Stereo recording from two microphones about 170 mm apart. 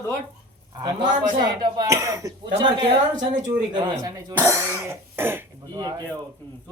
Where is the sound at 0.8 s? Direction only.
25° right (ahead or behind).